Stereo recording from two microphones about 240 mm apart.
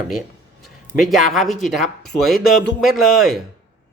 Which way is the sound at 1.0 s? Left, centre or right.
Centre.